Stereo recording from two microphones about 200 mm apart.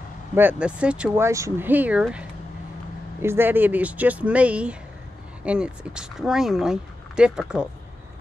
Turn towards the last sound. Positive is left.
turn(degrees=-5)  # may be behind; listen again after turning